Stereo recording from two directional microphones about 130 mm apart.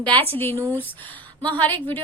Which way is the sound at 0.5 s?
20° right (ahead or behind).